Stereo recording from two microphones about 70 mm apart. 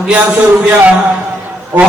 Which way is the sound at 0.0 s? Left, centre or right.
Centre.